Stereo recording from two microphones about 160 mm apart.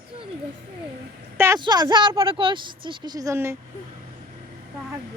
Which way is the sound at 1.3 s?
15° right (ahead or behind).